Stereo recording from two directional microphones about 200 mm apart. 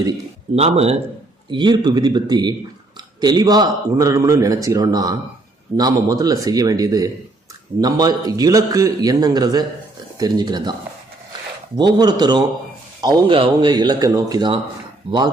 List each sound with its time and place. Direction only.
0.5 s a man's voice: 30° right (ahead or behind)
11.8 s a man's voice: 20° right (ahead or behind)